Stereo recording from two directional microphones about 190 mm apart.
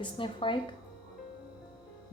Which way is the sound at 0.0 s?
25° left (ahead or behind).